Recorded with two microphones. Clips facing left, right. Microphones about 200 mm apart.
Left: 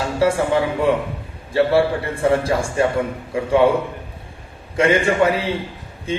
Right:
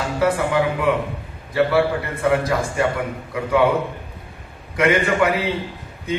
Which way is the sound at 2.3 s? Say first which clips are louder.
Left 1 dB; 30° left (ahead or behind).